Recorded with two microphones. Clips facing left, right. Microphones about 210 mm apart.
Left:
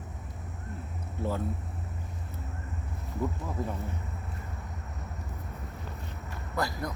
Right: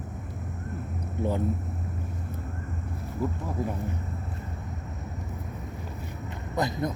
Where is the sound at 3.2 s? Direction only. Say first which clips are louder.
Right 2 dB; 5° right (ahead or behind).